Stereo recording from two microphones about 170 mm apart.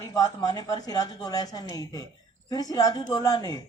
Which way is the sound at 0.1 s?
20° left (ahead or behind).